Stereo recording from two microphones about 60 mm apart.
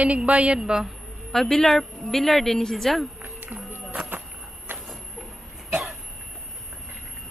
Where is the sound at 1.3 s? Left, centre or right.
Centre.